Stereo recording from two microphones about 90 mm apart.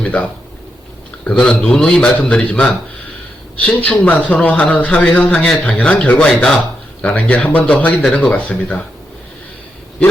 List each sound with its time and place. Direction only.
0.0 s a man's voice: 10° left (ahead or behind)